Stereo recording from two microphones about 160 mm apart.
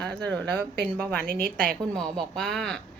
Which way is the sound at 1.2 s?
65° right (ahead or behind).